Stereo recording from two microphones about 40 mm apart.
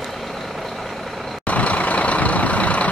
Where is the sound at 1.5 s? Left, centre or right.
Left.